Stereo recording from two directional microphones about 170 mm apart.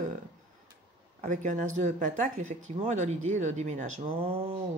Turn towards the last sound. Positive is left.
turn(degrees=-40)  # may be behind; listen again after turning